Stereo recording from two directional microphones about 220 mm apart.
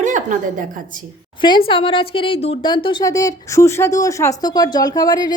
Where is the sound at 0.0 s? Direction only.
35° right (ahead or behind).